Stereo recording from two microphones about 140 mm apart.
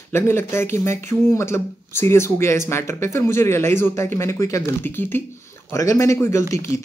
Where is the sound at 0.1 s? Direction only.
15° left (ahead or behind).